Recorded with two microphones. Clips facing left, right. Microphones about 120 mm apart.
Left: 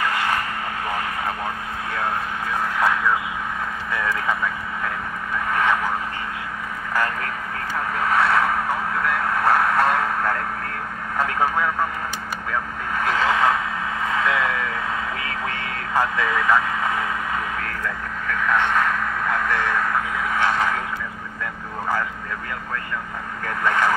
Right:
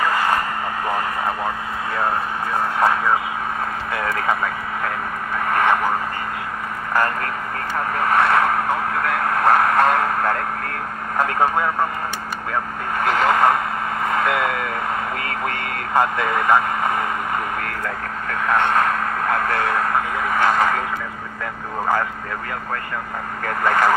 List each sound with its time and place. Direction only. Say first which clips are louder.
0.0 s vehicle: right 4 dB; 40° right (ahead or behind)
2.5 s vehicle: right 3 dB; 40° right (ahead or behind)
7.7 s vehicle: right 3 dB; 50° right (ahead or behind)
12.9 s a sound: right 3 dB; 50° right (ahead or behind)
14.0 s vehicle: right 2 dB; 55° right (ahead or behind)
23.4 s vehicle: right 3 dB; 55° right (ahead or behind)